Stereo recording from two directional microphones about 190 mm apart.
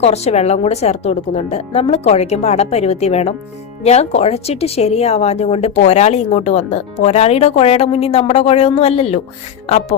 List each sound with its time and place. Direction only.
0.0 s speech: 35° left (ahead or behind)